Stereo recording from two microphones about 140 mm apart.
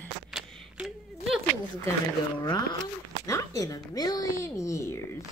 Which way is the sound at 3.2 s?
25° left (ahead or behind).